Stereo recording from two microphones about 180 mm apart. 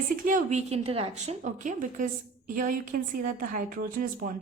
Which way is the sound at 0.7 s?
35° right (ahead or behind).